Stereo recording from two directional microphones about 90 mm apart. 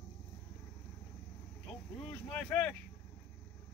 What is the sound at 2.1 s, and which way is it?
Speech, 15° left (ahead or behind).